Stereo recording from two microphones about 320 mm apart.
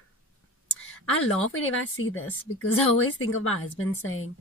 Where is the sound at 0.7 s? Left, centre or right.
Left.